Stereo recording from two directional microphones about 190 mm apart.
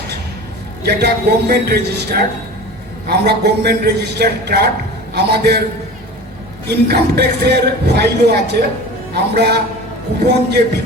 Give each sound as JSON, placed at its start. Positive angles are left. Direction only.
{"t": 0.9, "sound": "a man's voice", "side_deg": -60}
{"t": 6.7, "sound": "a man's voice", "side_deg": -60}